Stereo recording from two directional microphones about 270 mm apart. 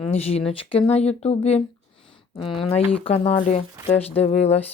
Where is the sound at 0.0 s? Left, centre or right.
Left.